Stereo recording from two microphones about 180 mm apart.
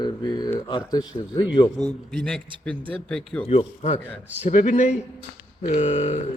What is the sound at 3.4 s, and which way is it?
A man's voice, 35° left (ahead or behind).